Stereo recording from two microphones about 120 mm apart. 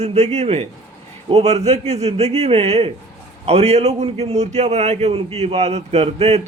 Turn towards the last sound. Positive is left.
turn(degrees=-60)  # may be behind; listen again after turning